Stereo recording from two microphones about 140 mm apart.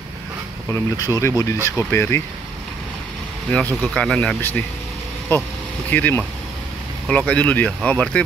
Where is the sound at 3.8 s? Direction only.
5° left (ahead or behind).